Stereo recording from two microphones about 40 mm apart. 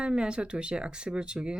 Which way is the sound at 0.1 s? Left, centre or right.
Right.